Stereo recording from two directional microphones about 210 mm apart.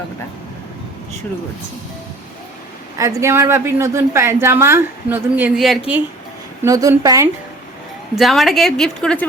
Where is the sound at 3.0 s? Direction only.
15° right (ahead or behind).